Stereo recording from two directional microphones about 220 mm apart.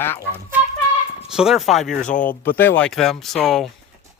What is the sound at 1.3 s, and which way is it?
Speech, centre (ahead or behind).